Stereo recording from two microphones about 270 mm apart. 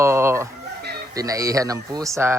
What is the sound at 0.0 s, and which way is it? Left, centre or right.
Chicken, centre.